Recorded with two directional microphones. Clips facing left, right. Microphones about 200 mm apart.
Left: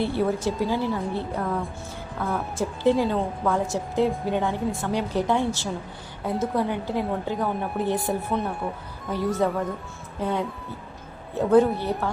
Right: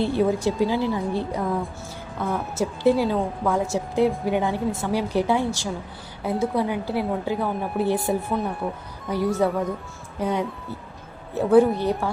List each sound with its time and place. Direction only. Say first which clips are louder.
0.0 s a woman's voice: right 3 dB; 15° right (ahead or behind); by 8.7 s centre (ahead or behind)
9.0 s a woman's voice: right 2 dB; 15° right (ahead or behind)